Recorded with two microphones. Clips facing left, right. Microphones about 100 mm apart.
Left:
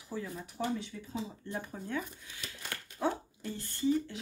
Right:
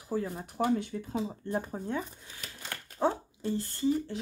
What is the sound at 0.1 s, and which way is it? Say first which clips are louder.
Speech: right 7 dB; 40° right (ahead or behind).